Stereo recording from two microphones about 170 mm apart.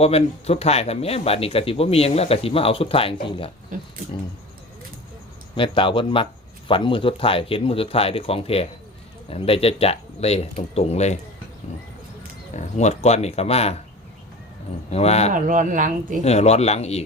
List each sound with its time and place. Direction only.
0.0 s speech: 35° left (ahead or behind)
3.7 s speech: 50° right (ahead or behind)
5.5 s speech: 30° left (ahead or behind)
12.5 s speech: 40° left (ahead or behind)
14.8 s speech: 40° left (ahead or behind)
15.3 s speech: 50° right (ahead or behind)
16.2 s speech: 40° left (ahead or behind)